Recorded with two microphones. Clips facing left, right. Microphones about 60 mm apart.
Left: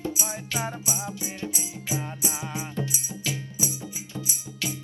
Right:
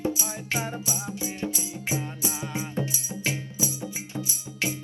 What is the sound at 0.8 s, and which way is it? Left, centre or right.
Music, left.